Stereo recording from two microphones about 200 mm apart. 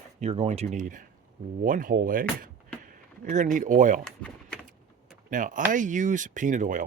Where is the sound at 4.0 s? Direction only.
5° left (ahead or behind).